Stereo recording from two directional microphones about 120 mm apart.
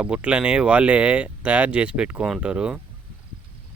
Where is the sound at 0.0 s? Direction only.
10° right (ahead or behind).